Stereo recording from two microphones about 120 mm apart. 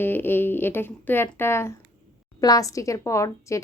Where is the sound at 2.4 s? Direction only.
30° left (ahead or behind).